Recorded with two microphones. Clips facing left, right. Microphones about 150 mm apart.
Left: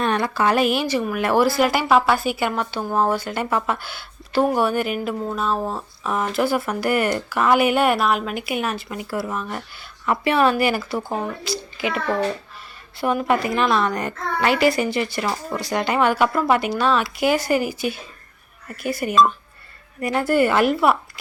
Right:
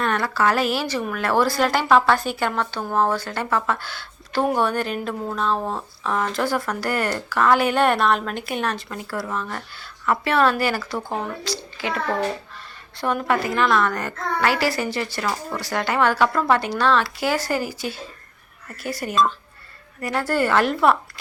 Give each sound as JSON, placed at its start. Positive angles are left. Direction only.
{"t": 0.0, "sound": "speech", "side_deg": 20}